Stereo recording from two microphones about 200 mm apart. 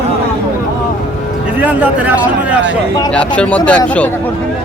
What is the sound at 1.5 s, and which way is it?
A man's voice, 5° right (ahead or behind).